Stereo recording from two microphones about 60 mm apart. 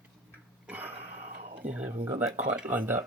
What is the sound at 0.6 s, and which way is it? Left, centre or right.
Throat clearing, right.